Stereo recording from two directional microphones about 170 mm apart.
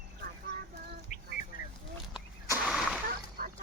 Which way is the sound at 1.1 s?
45° left (ahead or behind).